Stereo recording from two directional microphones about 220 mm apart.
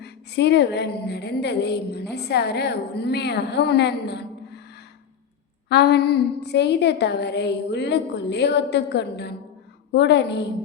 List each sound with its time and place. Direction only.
0.0 s a woman's voice: 50° left (ahead or behind)
5.6 s a sound: 50° left (ahead or behind)
6.4 s a woman's voice: 50° left (ahead or behind)